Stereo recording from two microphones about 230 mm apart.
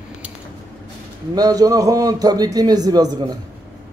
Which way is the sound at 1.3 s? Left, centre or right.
Centre.